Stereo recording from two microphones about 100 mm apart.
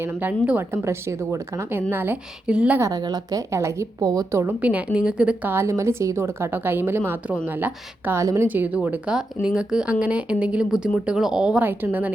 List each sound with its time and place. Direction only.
0.0 s a woman's voice: 20° right (ahead or behind)
2.5 s speech: 10° right (ahead or behind)
2.9 s a woman's voice: 40° right (ahead or behind)
4.6 s speech: 15° right (ahead or behind)
5.5 s a woman's voice: 25° right (ahead or behind)
8.2 s a woman's voice: 30° right (ahead or behind)
8.4 s speech: 15° right (ahead or behind)
11.6 s a woman's voice: 20° right (ahead or behind)